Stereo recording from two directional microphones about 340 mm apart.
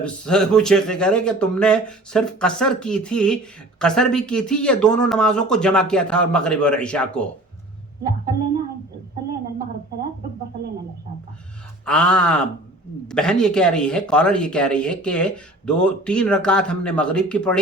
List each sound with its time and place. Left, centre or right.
0.0 s speech: centre
11.9 s speech: centre